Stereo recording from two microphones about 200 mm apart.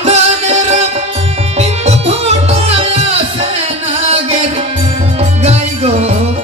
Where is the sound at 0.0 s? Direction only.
35° right (ahead or behind).